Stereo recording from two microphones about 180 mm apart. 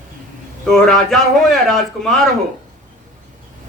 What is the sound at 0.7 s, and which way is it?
Speech, centre (ahead or behind).